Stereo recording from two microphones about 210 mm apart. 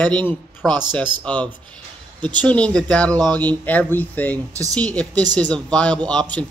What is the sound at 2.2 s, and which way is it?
Speech, 20° right (ahead or behind).